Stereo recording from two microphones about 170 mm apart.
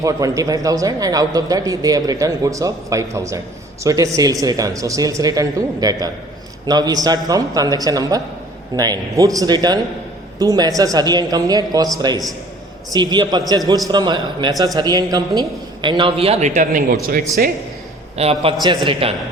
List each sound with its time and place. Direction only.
0.0 s speech: 20° right (ahead or behind)
12.9 s a man's voice: 25° right (ahead or behind); by 17.5 s 60° right (ahead or behind)
18.2 s a man's voice: 35° right (ahead or behind)